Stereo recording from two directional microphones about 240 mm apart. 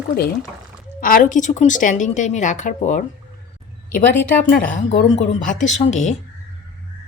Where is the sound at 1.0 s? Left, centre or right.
Left.